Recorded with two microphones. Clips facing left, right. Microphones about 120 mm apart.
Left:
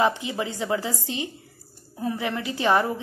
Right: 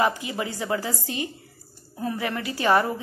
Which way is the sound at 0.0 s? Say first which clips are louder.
Left 1 dB; 25° left (ahead or behind).